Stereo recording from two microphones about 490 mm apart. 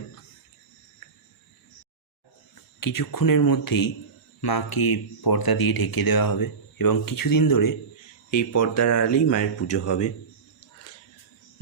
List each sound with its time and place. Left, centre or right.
2.8 s speech: left